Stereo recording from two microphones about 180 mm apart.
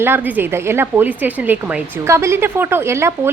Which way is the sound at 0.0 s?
10° right (ahead or behind).